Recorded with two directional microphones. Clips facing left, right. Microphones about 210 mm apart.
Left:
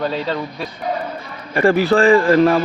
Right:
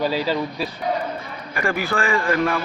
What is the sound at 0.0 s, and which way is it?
Speech, 5° right (ahead or behind).